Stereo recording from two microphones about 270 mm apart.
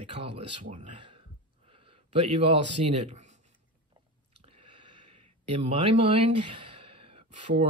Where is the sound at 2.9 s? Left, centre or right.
Right.